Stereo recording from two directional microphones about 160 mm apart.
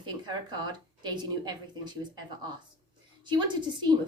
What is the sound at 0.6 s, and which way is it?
Speech, 25° right (ahead or behind).